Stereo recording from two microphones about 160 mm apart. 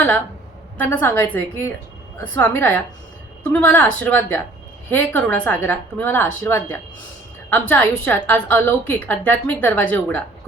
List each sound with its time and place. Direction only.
0.8 s a woman's voice: 15° left (ahead or behind)